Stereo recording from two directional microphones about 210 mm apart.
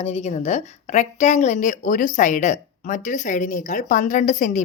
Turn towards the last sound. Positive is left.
turn(degrees=35)  # may be behind; listen again after turning